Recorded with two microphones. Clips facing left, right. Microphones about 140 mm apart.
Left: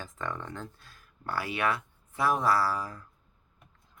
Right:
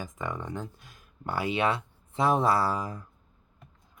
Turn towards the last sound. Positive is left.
turn(degrees=-20)  # may be behind; listen again after turning